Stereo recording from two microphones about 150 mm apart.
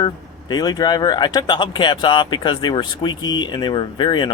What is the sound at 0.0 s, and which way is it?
Speech, 25° left (ahead or behind).